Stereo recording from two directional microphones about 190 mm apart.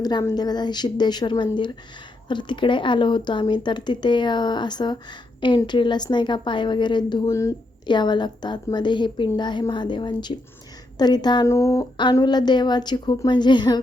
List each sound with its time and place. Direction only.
0.0 s a woman's voice: 20° left (ahead or behind)